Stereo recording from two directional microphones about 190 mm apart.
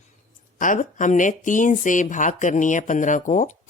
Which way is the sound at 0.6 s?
45° left (ahead or behind).